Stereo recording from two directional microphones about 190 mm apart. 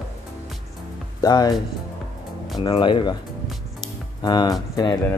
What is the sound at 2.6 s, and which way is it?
Speech, 25° left (ahead or behind).